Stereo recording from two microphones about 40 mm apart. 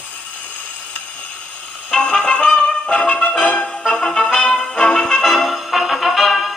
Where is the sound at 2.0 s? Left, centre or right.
Left.